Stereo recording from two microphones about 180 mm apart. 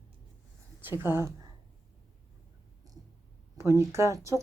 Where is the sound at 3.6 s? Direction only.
15° right (ahead or behind).